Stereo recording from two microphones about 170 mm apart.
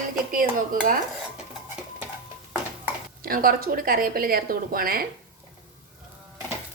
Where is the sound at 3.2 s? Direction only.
60° right (ahead or behind).